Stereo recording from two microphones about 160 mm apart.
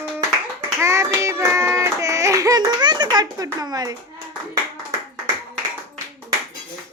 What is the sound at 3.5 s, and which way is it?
Speech, 25° right (ahead or behind).